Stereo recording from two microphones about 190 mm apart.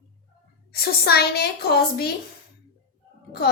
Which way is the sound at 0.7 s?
55° left (ahead or behind).